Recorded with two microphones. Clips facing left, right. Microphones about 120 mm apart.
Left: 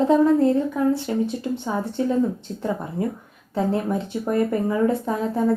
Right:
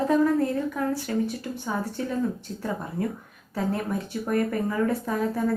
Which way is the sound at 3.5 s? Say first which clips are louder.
Left 5 dB; 25° left (ahead or behind).